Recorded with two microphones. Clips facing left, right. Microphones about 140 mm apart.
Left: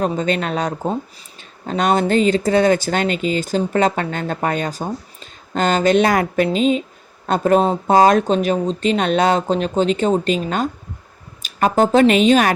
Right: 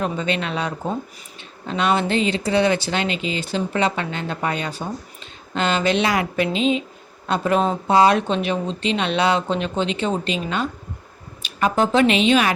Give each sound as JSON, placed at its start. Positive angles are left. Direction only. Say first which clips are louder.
{"t": 0.0, "sound": "speech", "louder": "left 4 dB", "side_deg": 45}